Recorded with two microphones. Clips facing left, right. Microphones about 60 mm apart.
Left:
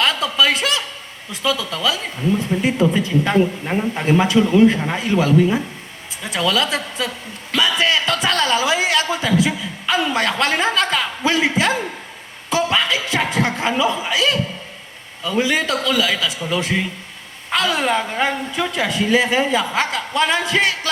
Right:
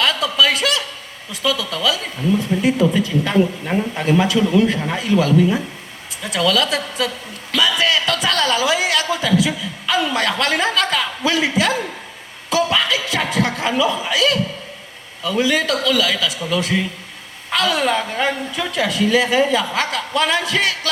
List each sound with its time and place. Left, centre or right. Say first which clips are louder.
0.0 s a sound: even; left
1.3 s a man's voice: even; left
6.3 s a woman's voice: right 1 dB; left